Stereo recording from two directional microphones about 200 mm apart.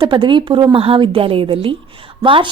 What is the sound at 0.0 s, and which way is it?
A woman's voice, 25° right (ahead or behind).